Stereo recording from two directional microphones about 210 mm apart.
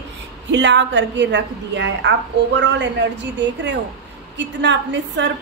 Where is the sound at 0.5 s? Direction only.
55° right (ahead or behind).